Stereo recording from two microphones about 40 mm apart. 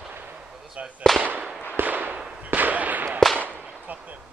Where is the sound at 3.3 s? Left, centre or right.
Right.